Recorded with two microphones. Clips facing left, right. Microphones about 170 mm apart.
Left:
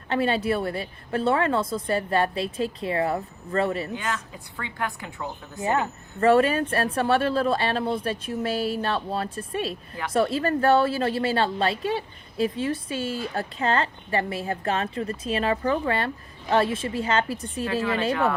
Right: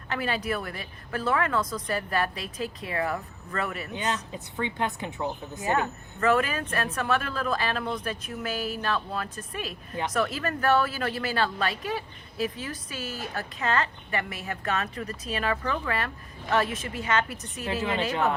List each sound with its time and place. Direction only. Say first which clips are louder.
0.1 s a woman's voice: left 6 dB; 30° left (ahead or behind)
3.9 s speech: even; 25° right (ahead or behind)
5.5 s a woman's voice: left 3 dB; 25° left (ahead or behind)
17.7 s speech: left 3 dB; 25° right (ahead or behind)